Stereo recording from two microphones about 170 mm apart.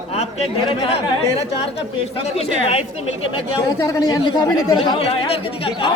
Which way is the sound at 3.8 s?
20° left (ahead or behind).